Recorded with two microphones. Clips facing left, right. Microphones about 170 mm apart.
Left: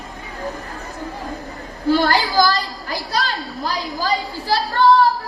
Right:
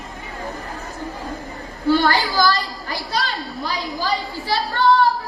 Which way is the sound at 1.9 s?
40° left (ahead or behind).